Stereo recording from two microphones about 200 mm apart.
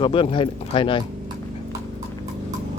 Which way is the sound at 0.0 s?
25° left (ahead or behind).